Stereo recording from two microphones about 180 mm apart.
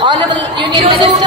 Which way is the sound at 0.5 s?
25° right (ahead or behind).